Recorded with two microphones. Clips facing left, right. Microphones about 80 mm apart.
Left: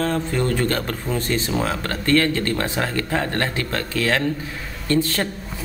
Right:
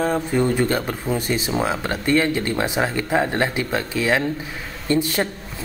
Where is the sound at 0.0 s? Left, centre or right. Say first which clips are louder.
Right 2 dB; centre.